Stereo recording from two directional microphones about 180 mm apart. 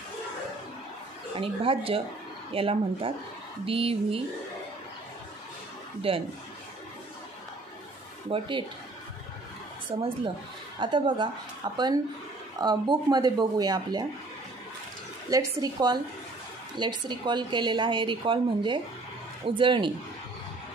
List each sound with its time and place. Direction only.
1.3 s speech: 30° right (ahead or behind)
6.1 s speech: 30° right (ahead or behind)
8.3 s speech: 25° right (ahead or behind)
9.9 s speech: 25° right (ahead or behind)
15.2 s speech: 20° right (ahead or behind)